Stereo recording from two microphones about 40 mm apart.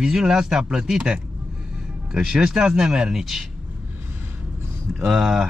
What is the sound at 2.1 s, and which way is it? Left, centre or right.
Speech, centre.